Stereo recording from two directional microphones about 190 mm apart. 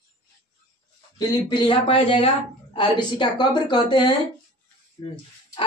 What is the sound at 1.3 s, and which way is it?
Speech, 25° left (ahead or behind).